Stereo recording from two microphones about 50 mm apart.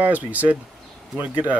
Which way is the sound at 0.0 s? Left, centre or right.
Right.